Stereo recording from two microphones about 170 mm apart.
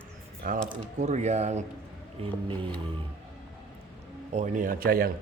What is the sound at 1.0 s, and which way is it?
Speech, 45° right (ahead or behind).